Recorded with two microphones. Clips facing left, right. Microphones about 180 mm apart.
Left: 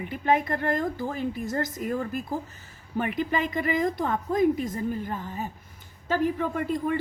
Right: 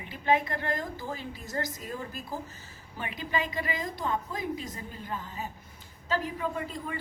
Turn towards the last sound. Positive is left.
turn(degrees=55)  # may be behind; listen again after turning